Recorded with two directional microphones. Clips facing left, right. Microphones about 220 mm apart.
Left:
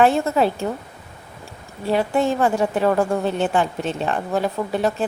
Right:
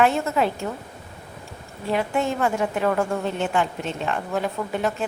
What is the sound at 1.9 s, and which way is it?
A woman's voice, 35° left (ahead or behind).